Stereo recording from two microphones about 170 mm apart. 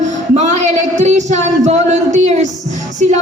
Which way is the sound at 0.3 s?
40° right (ahead or behind).